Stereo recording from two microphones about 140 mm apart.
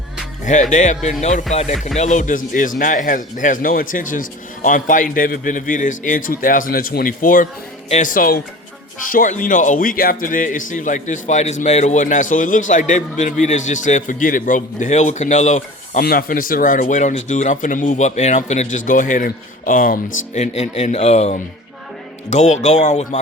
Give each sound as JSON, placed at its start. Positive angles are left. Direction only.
{"t": 0.7, "sound": "speech", "side_deg": 55}
{"t": 7.9, "sound": "speech", "side_deg": 55}
{"t": 8.1, "sound": "speech", "side_deg": 90}
{"t": 9.0, "sound": "speech", "side_deg": 70}
{"t": 20.4, "sound": "speech", "side_deg": 55}